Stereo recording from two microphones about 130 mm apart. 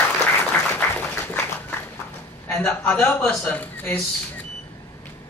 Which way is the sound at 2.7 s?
15° left (ahead or behind).